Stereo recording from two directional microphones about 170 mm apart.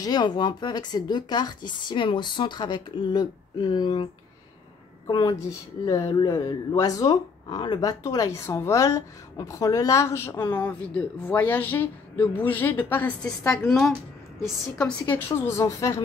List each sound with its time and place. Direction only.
0.0 s speech: 25° left (ahead or behind)
13.6 s speech: centre (ahead or behind); by 16.0 s 20° left (ahead or behind)